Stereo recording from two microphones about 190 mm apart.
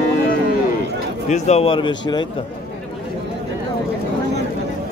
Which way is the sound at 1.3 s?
35° left (ahead or behind).